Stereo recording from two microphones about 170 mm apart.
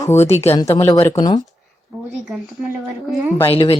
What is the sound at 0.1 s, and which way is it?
Speech, 15° left (ahead or behind).